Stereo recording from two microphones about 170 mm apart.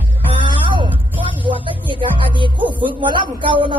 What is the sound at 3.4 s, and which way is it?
Speech, 30° right (ahead or behind).